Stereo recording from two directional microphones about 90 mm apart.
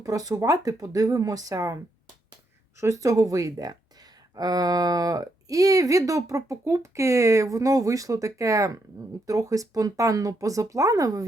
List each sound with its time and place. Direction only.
0.0 s speech: 45° right (ahead or behind)